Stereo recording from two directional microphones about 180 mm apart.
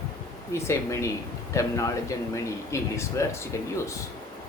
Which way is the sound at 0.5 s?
15° left (ahead or behind).